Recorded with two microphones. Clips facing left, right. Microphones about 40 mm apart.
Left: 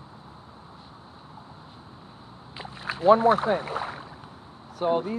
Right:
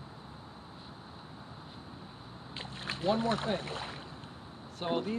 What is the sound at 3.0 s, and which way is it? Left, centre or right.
Speech, left.